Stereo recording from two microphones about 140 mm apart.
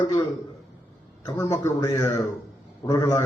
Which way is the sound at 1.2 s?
20° left (ahead or behind).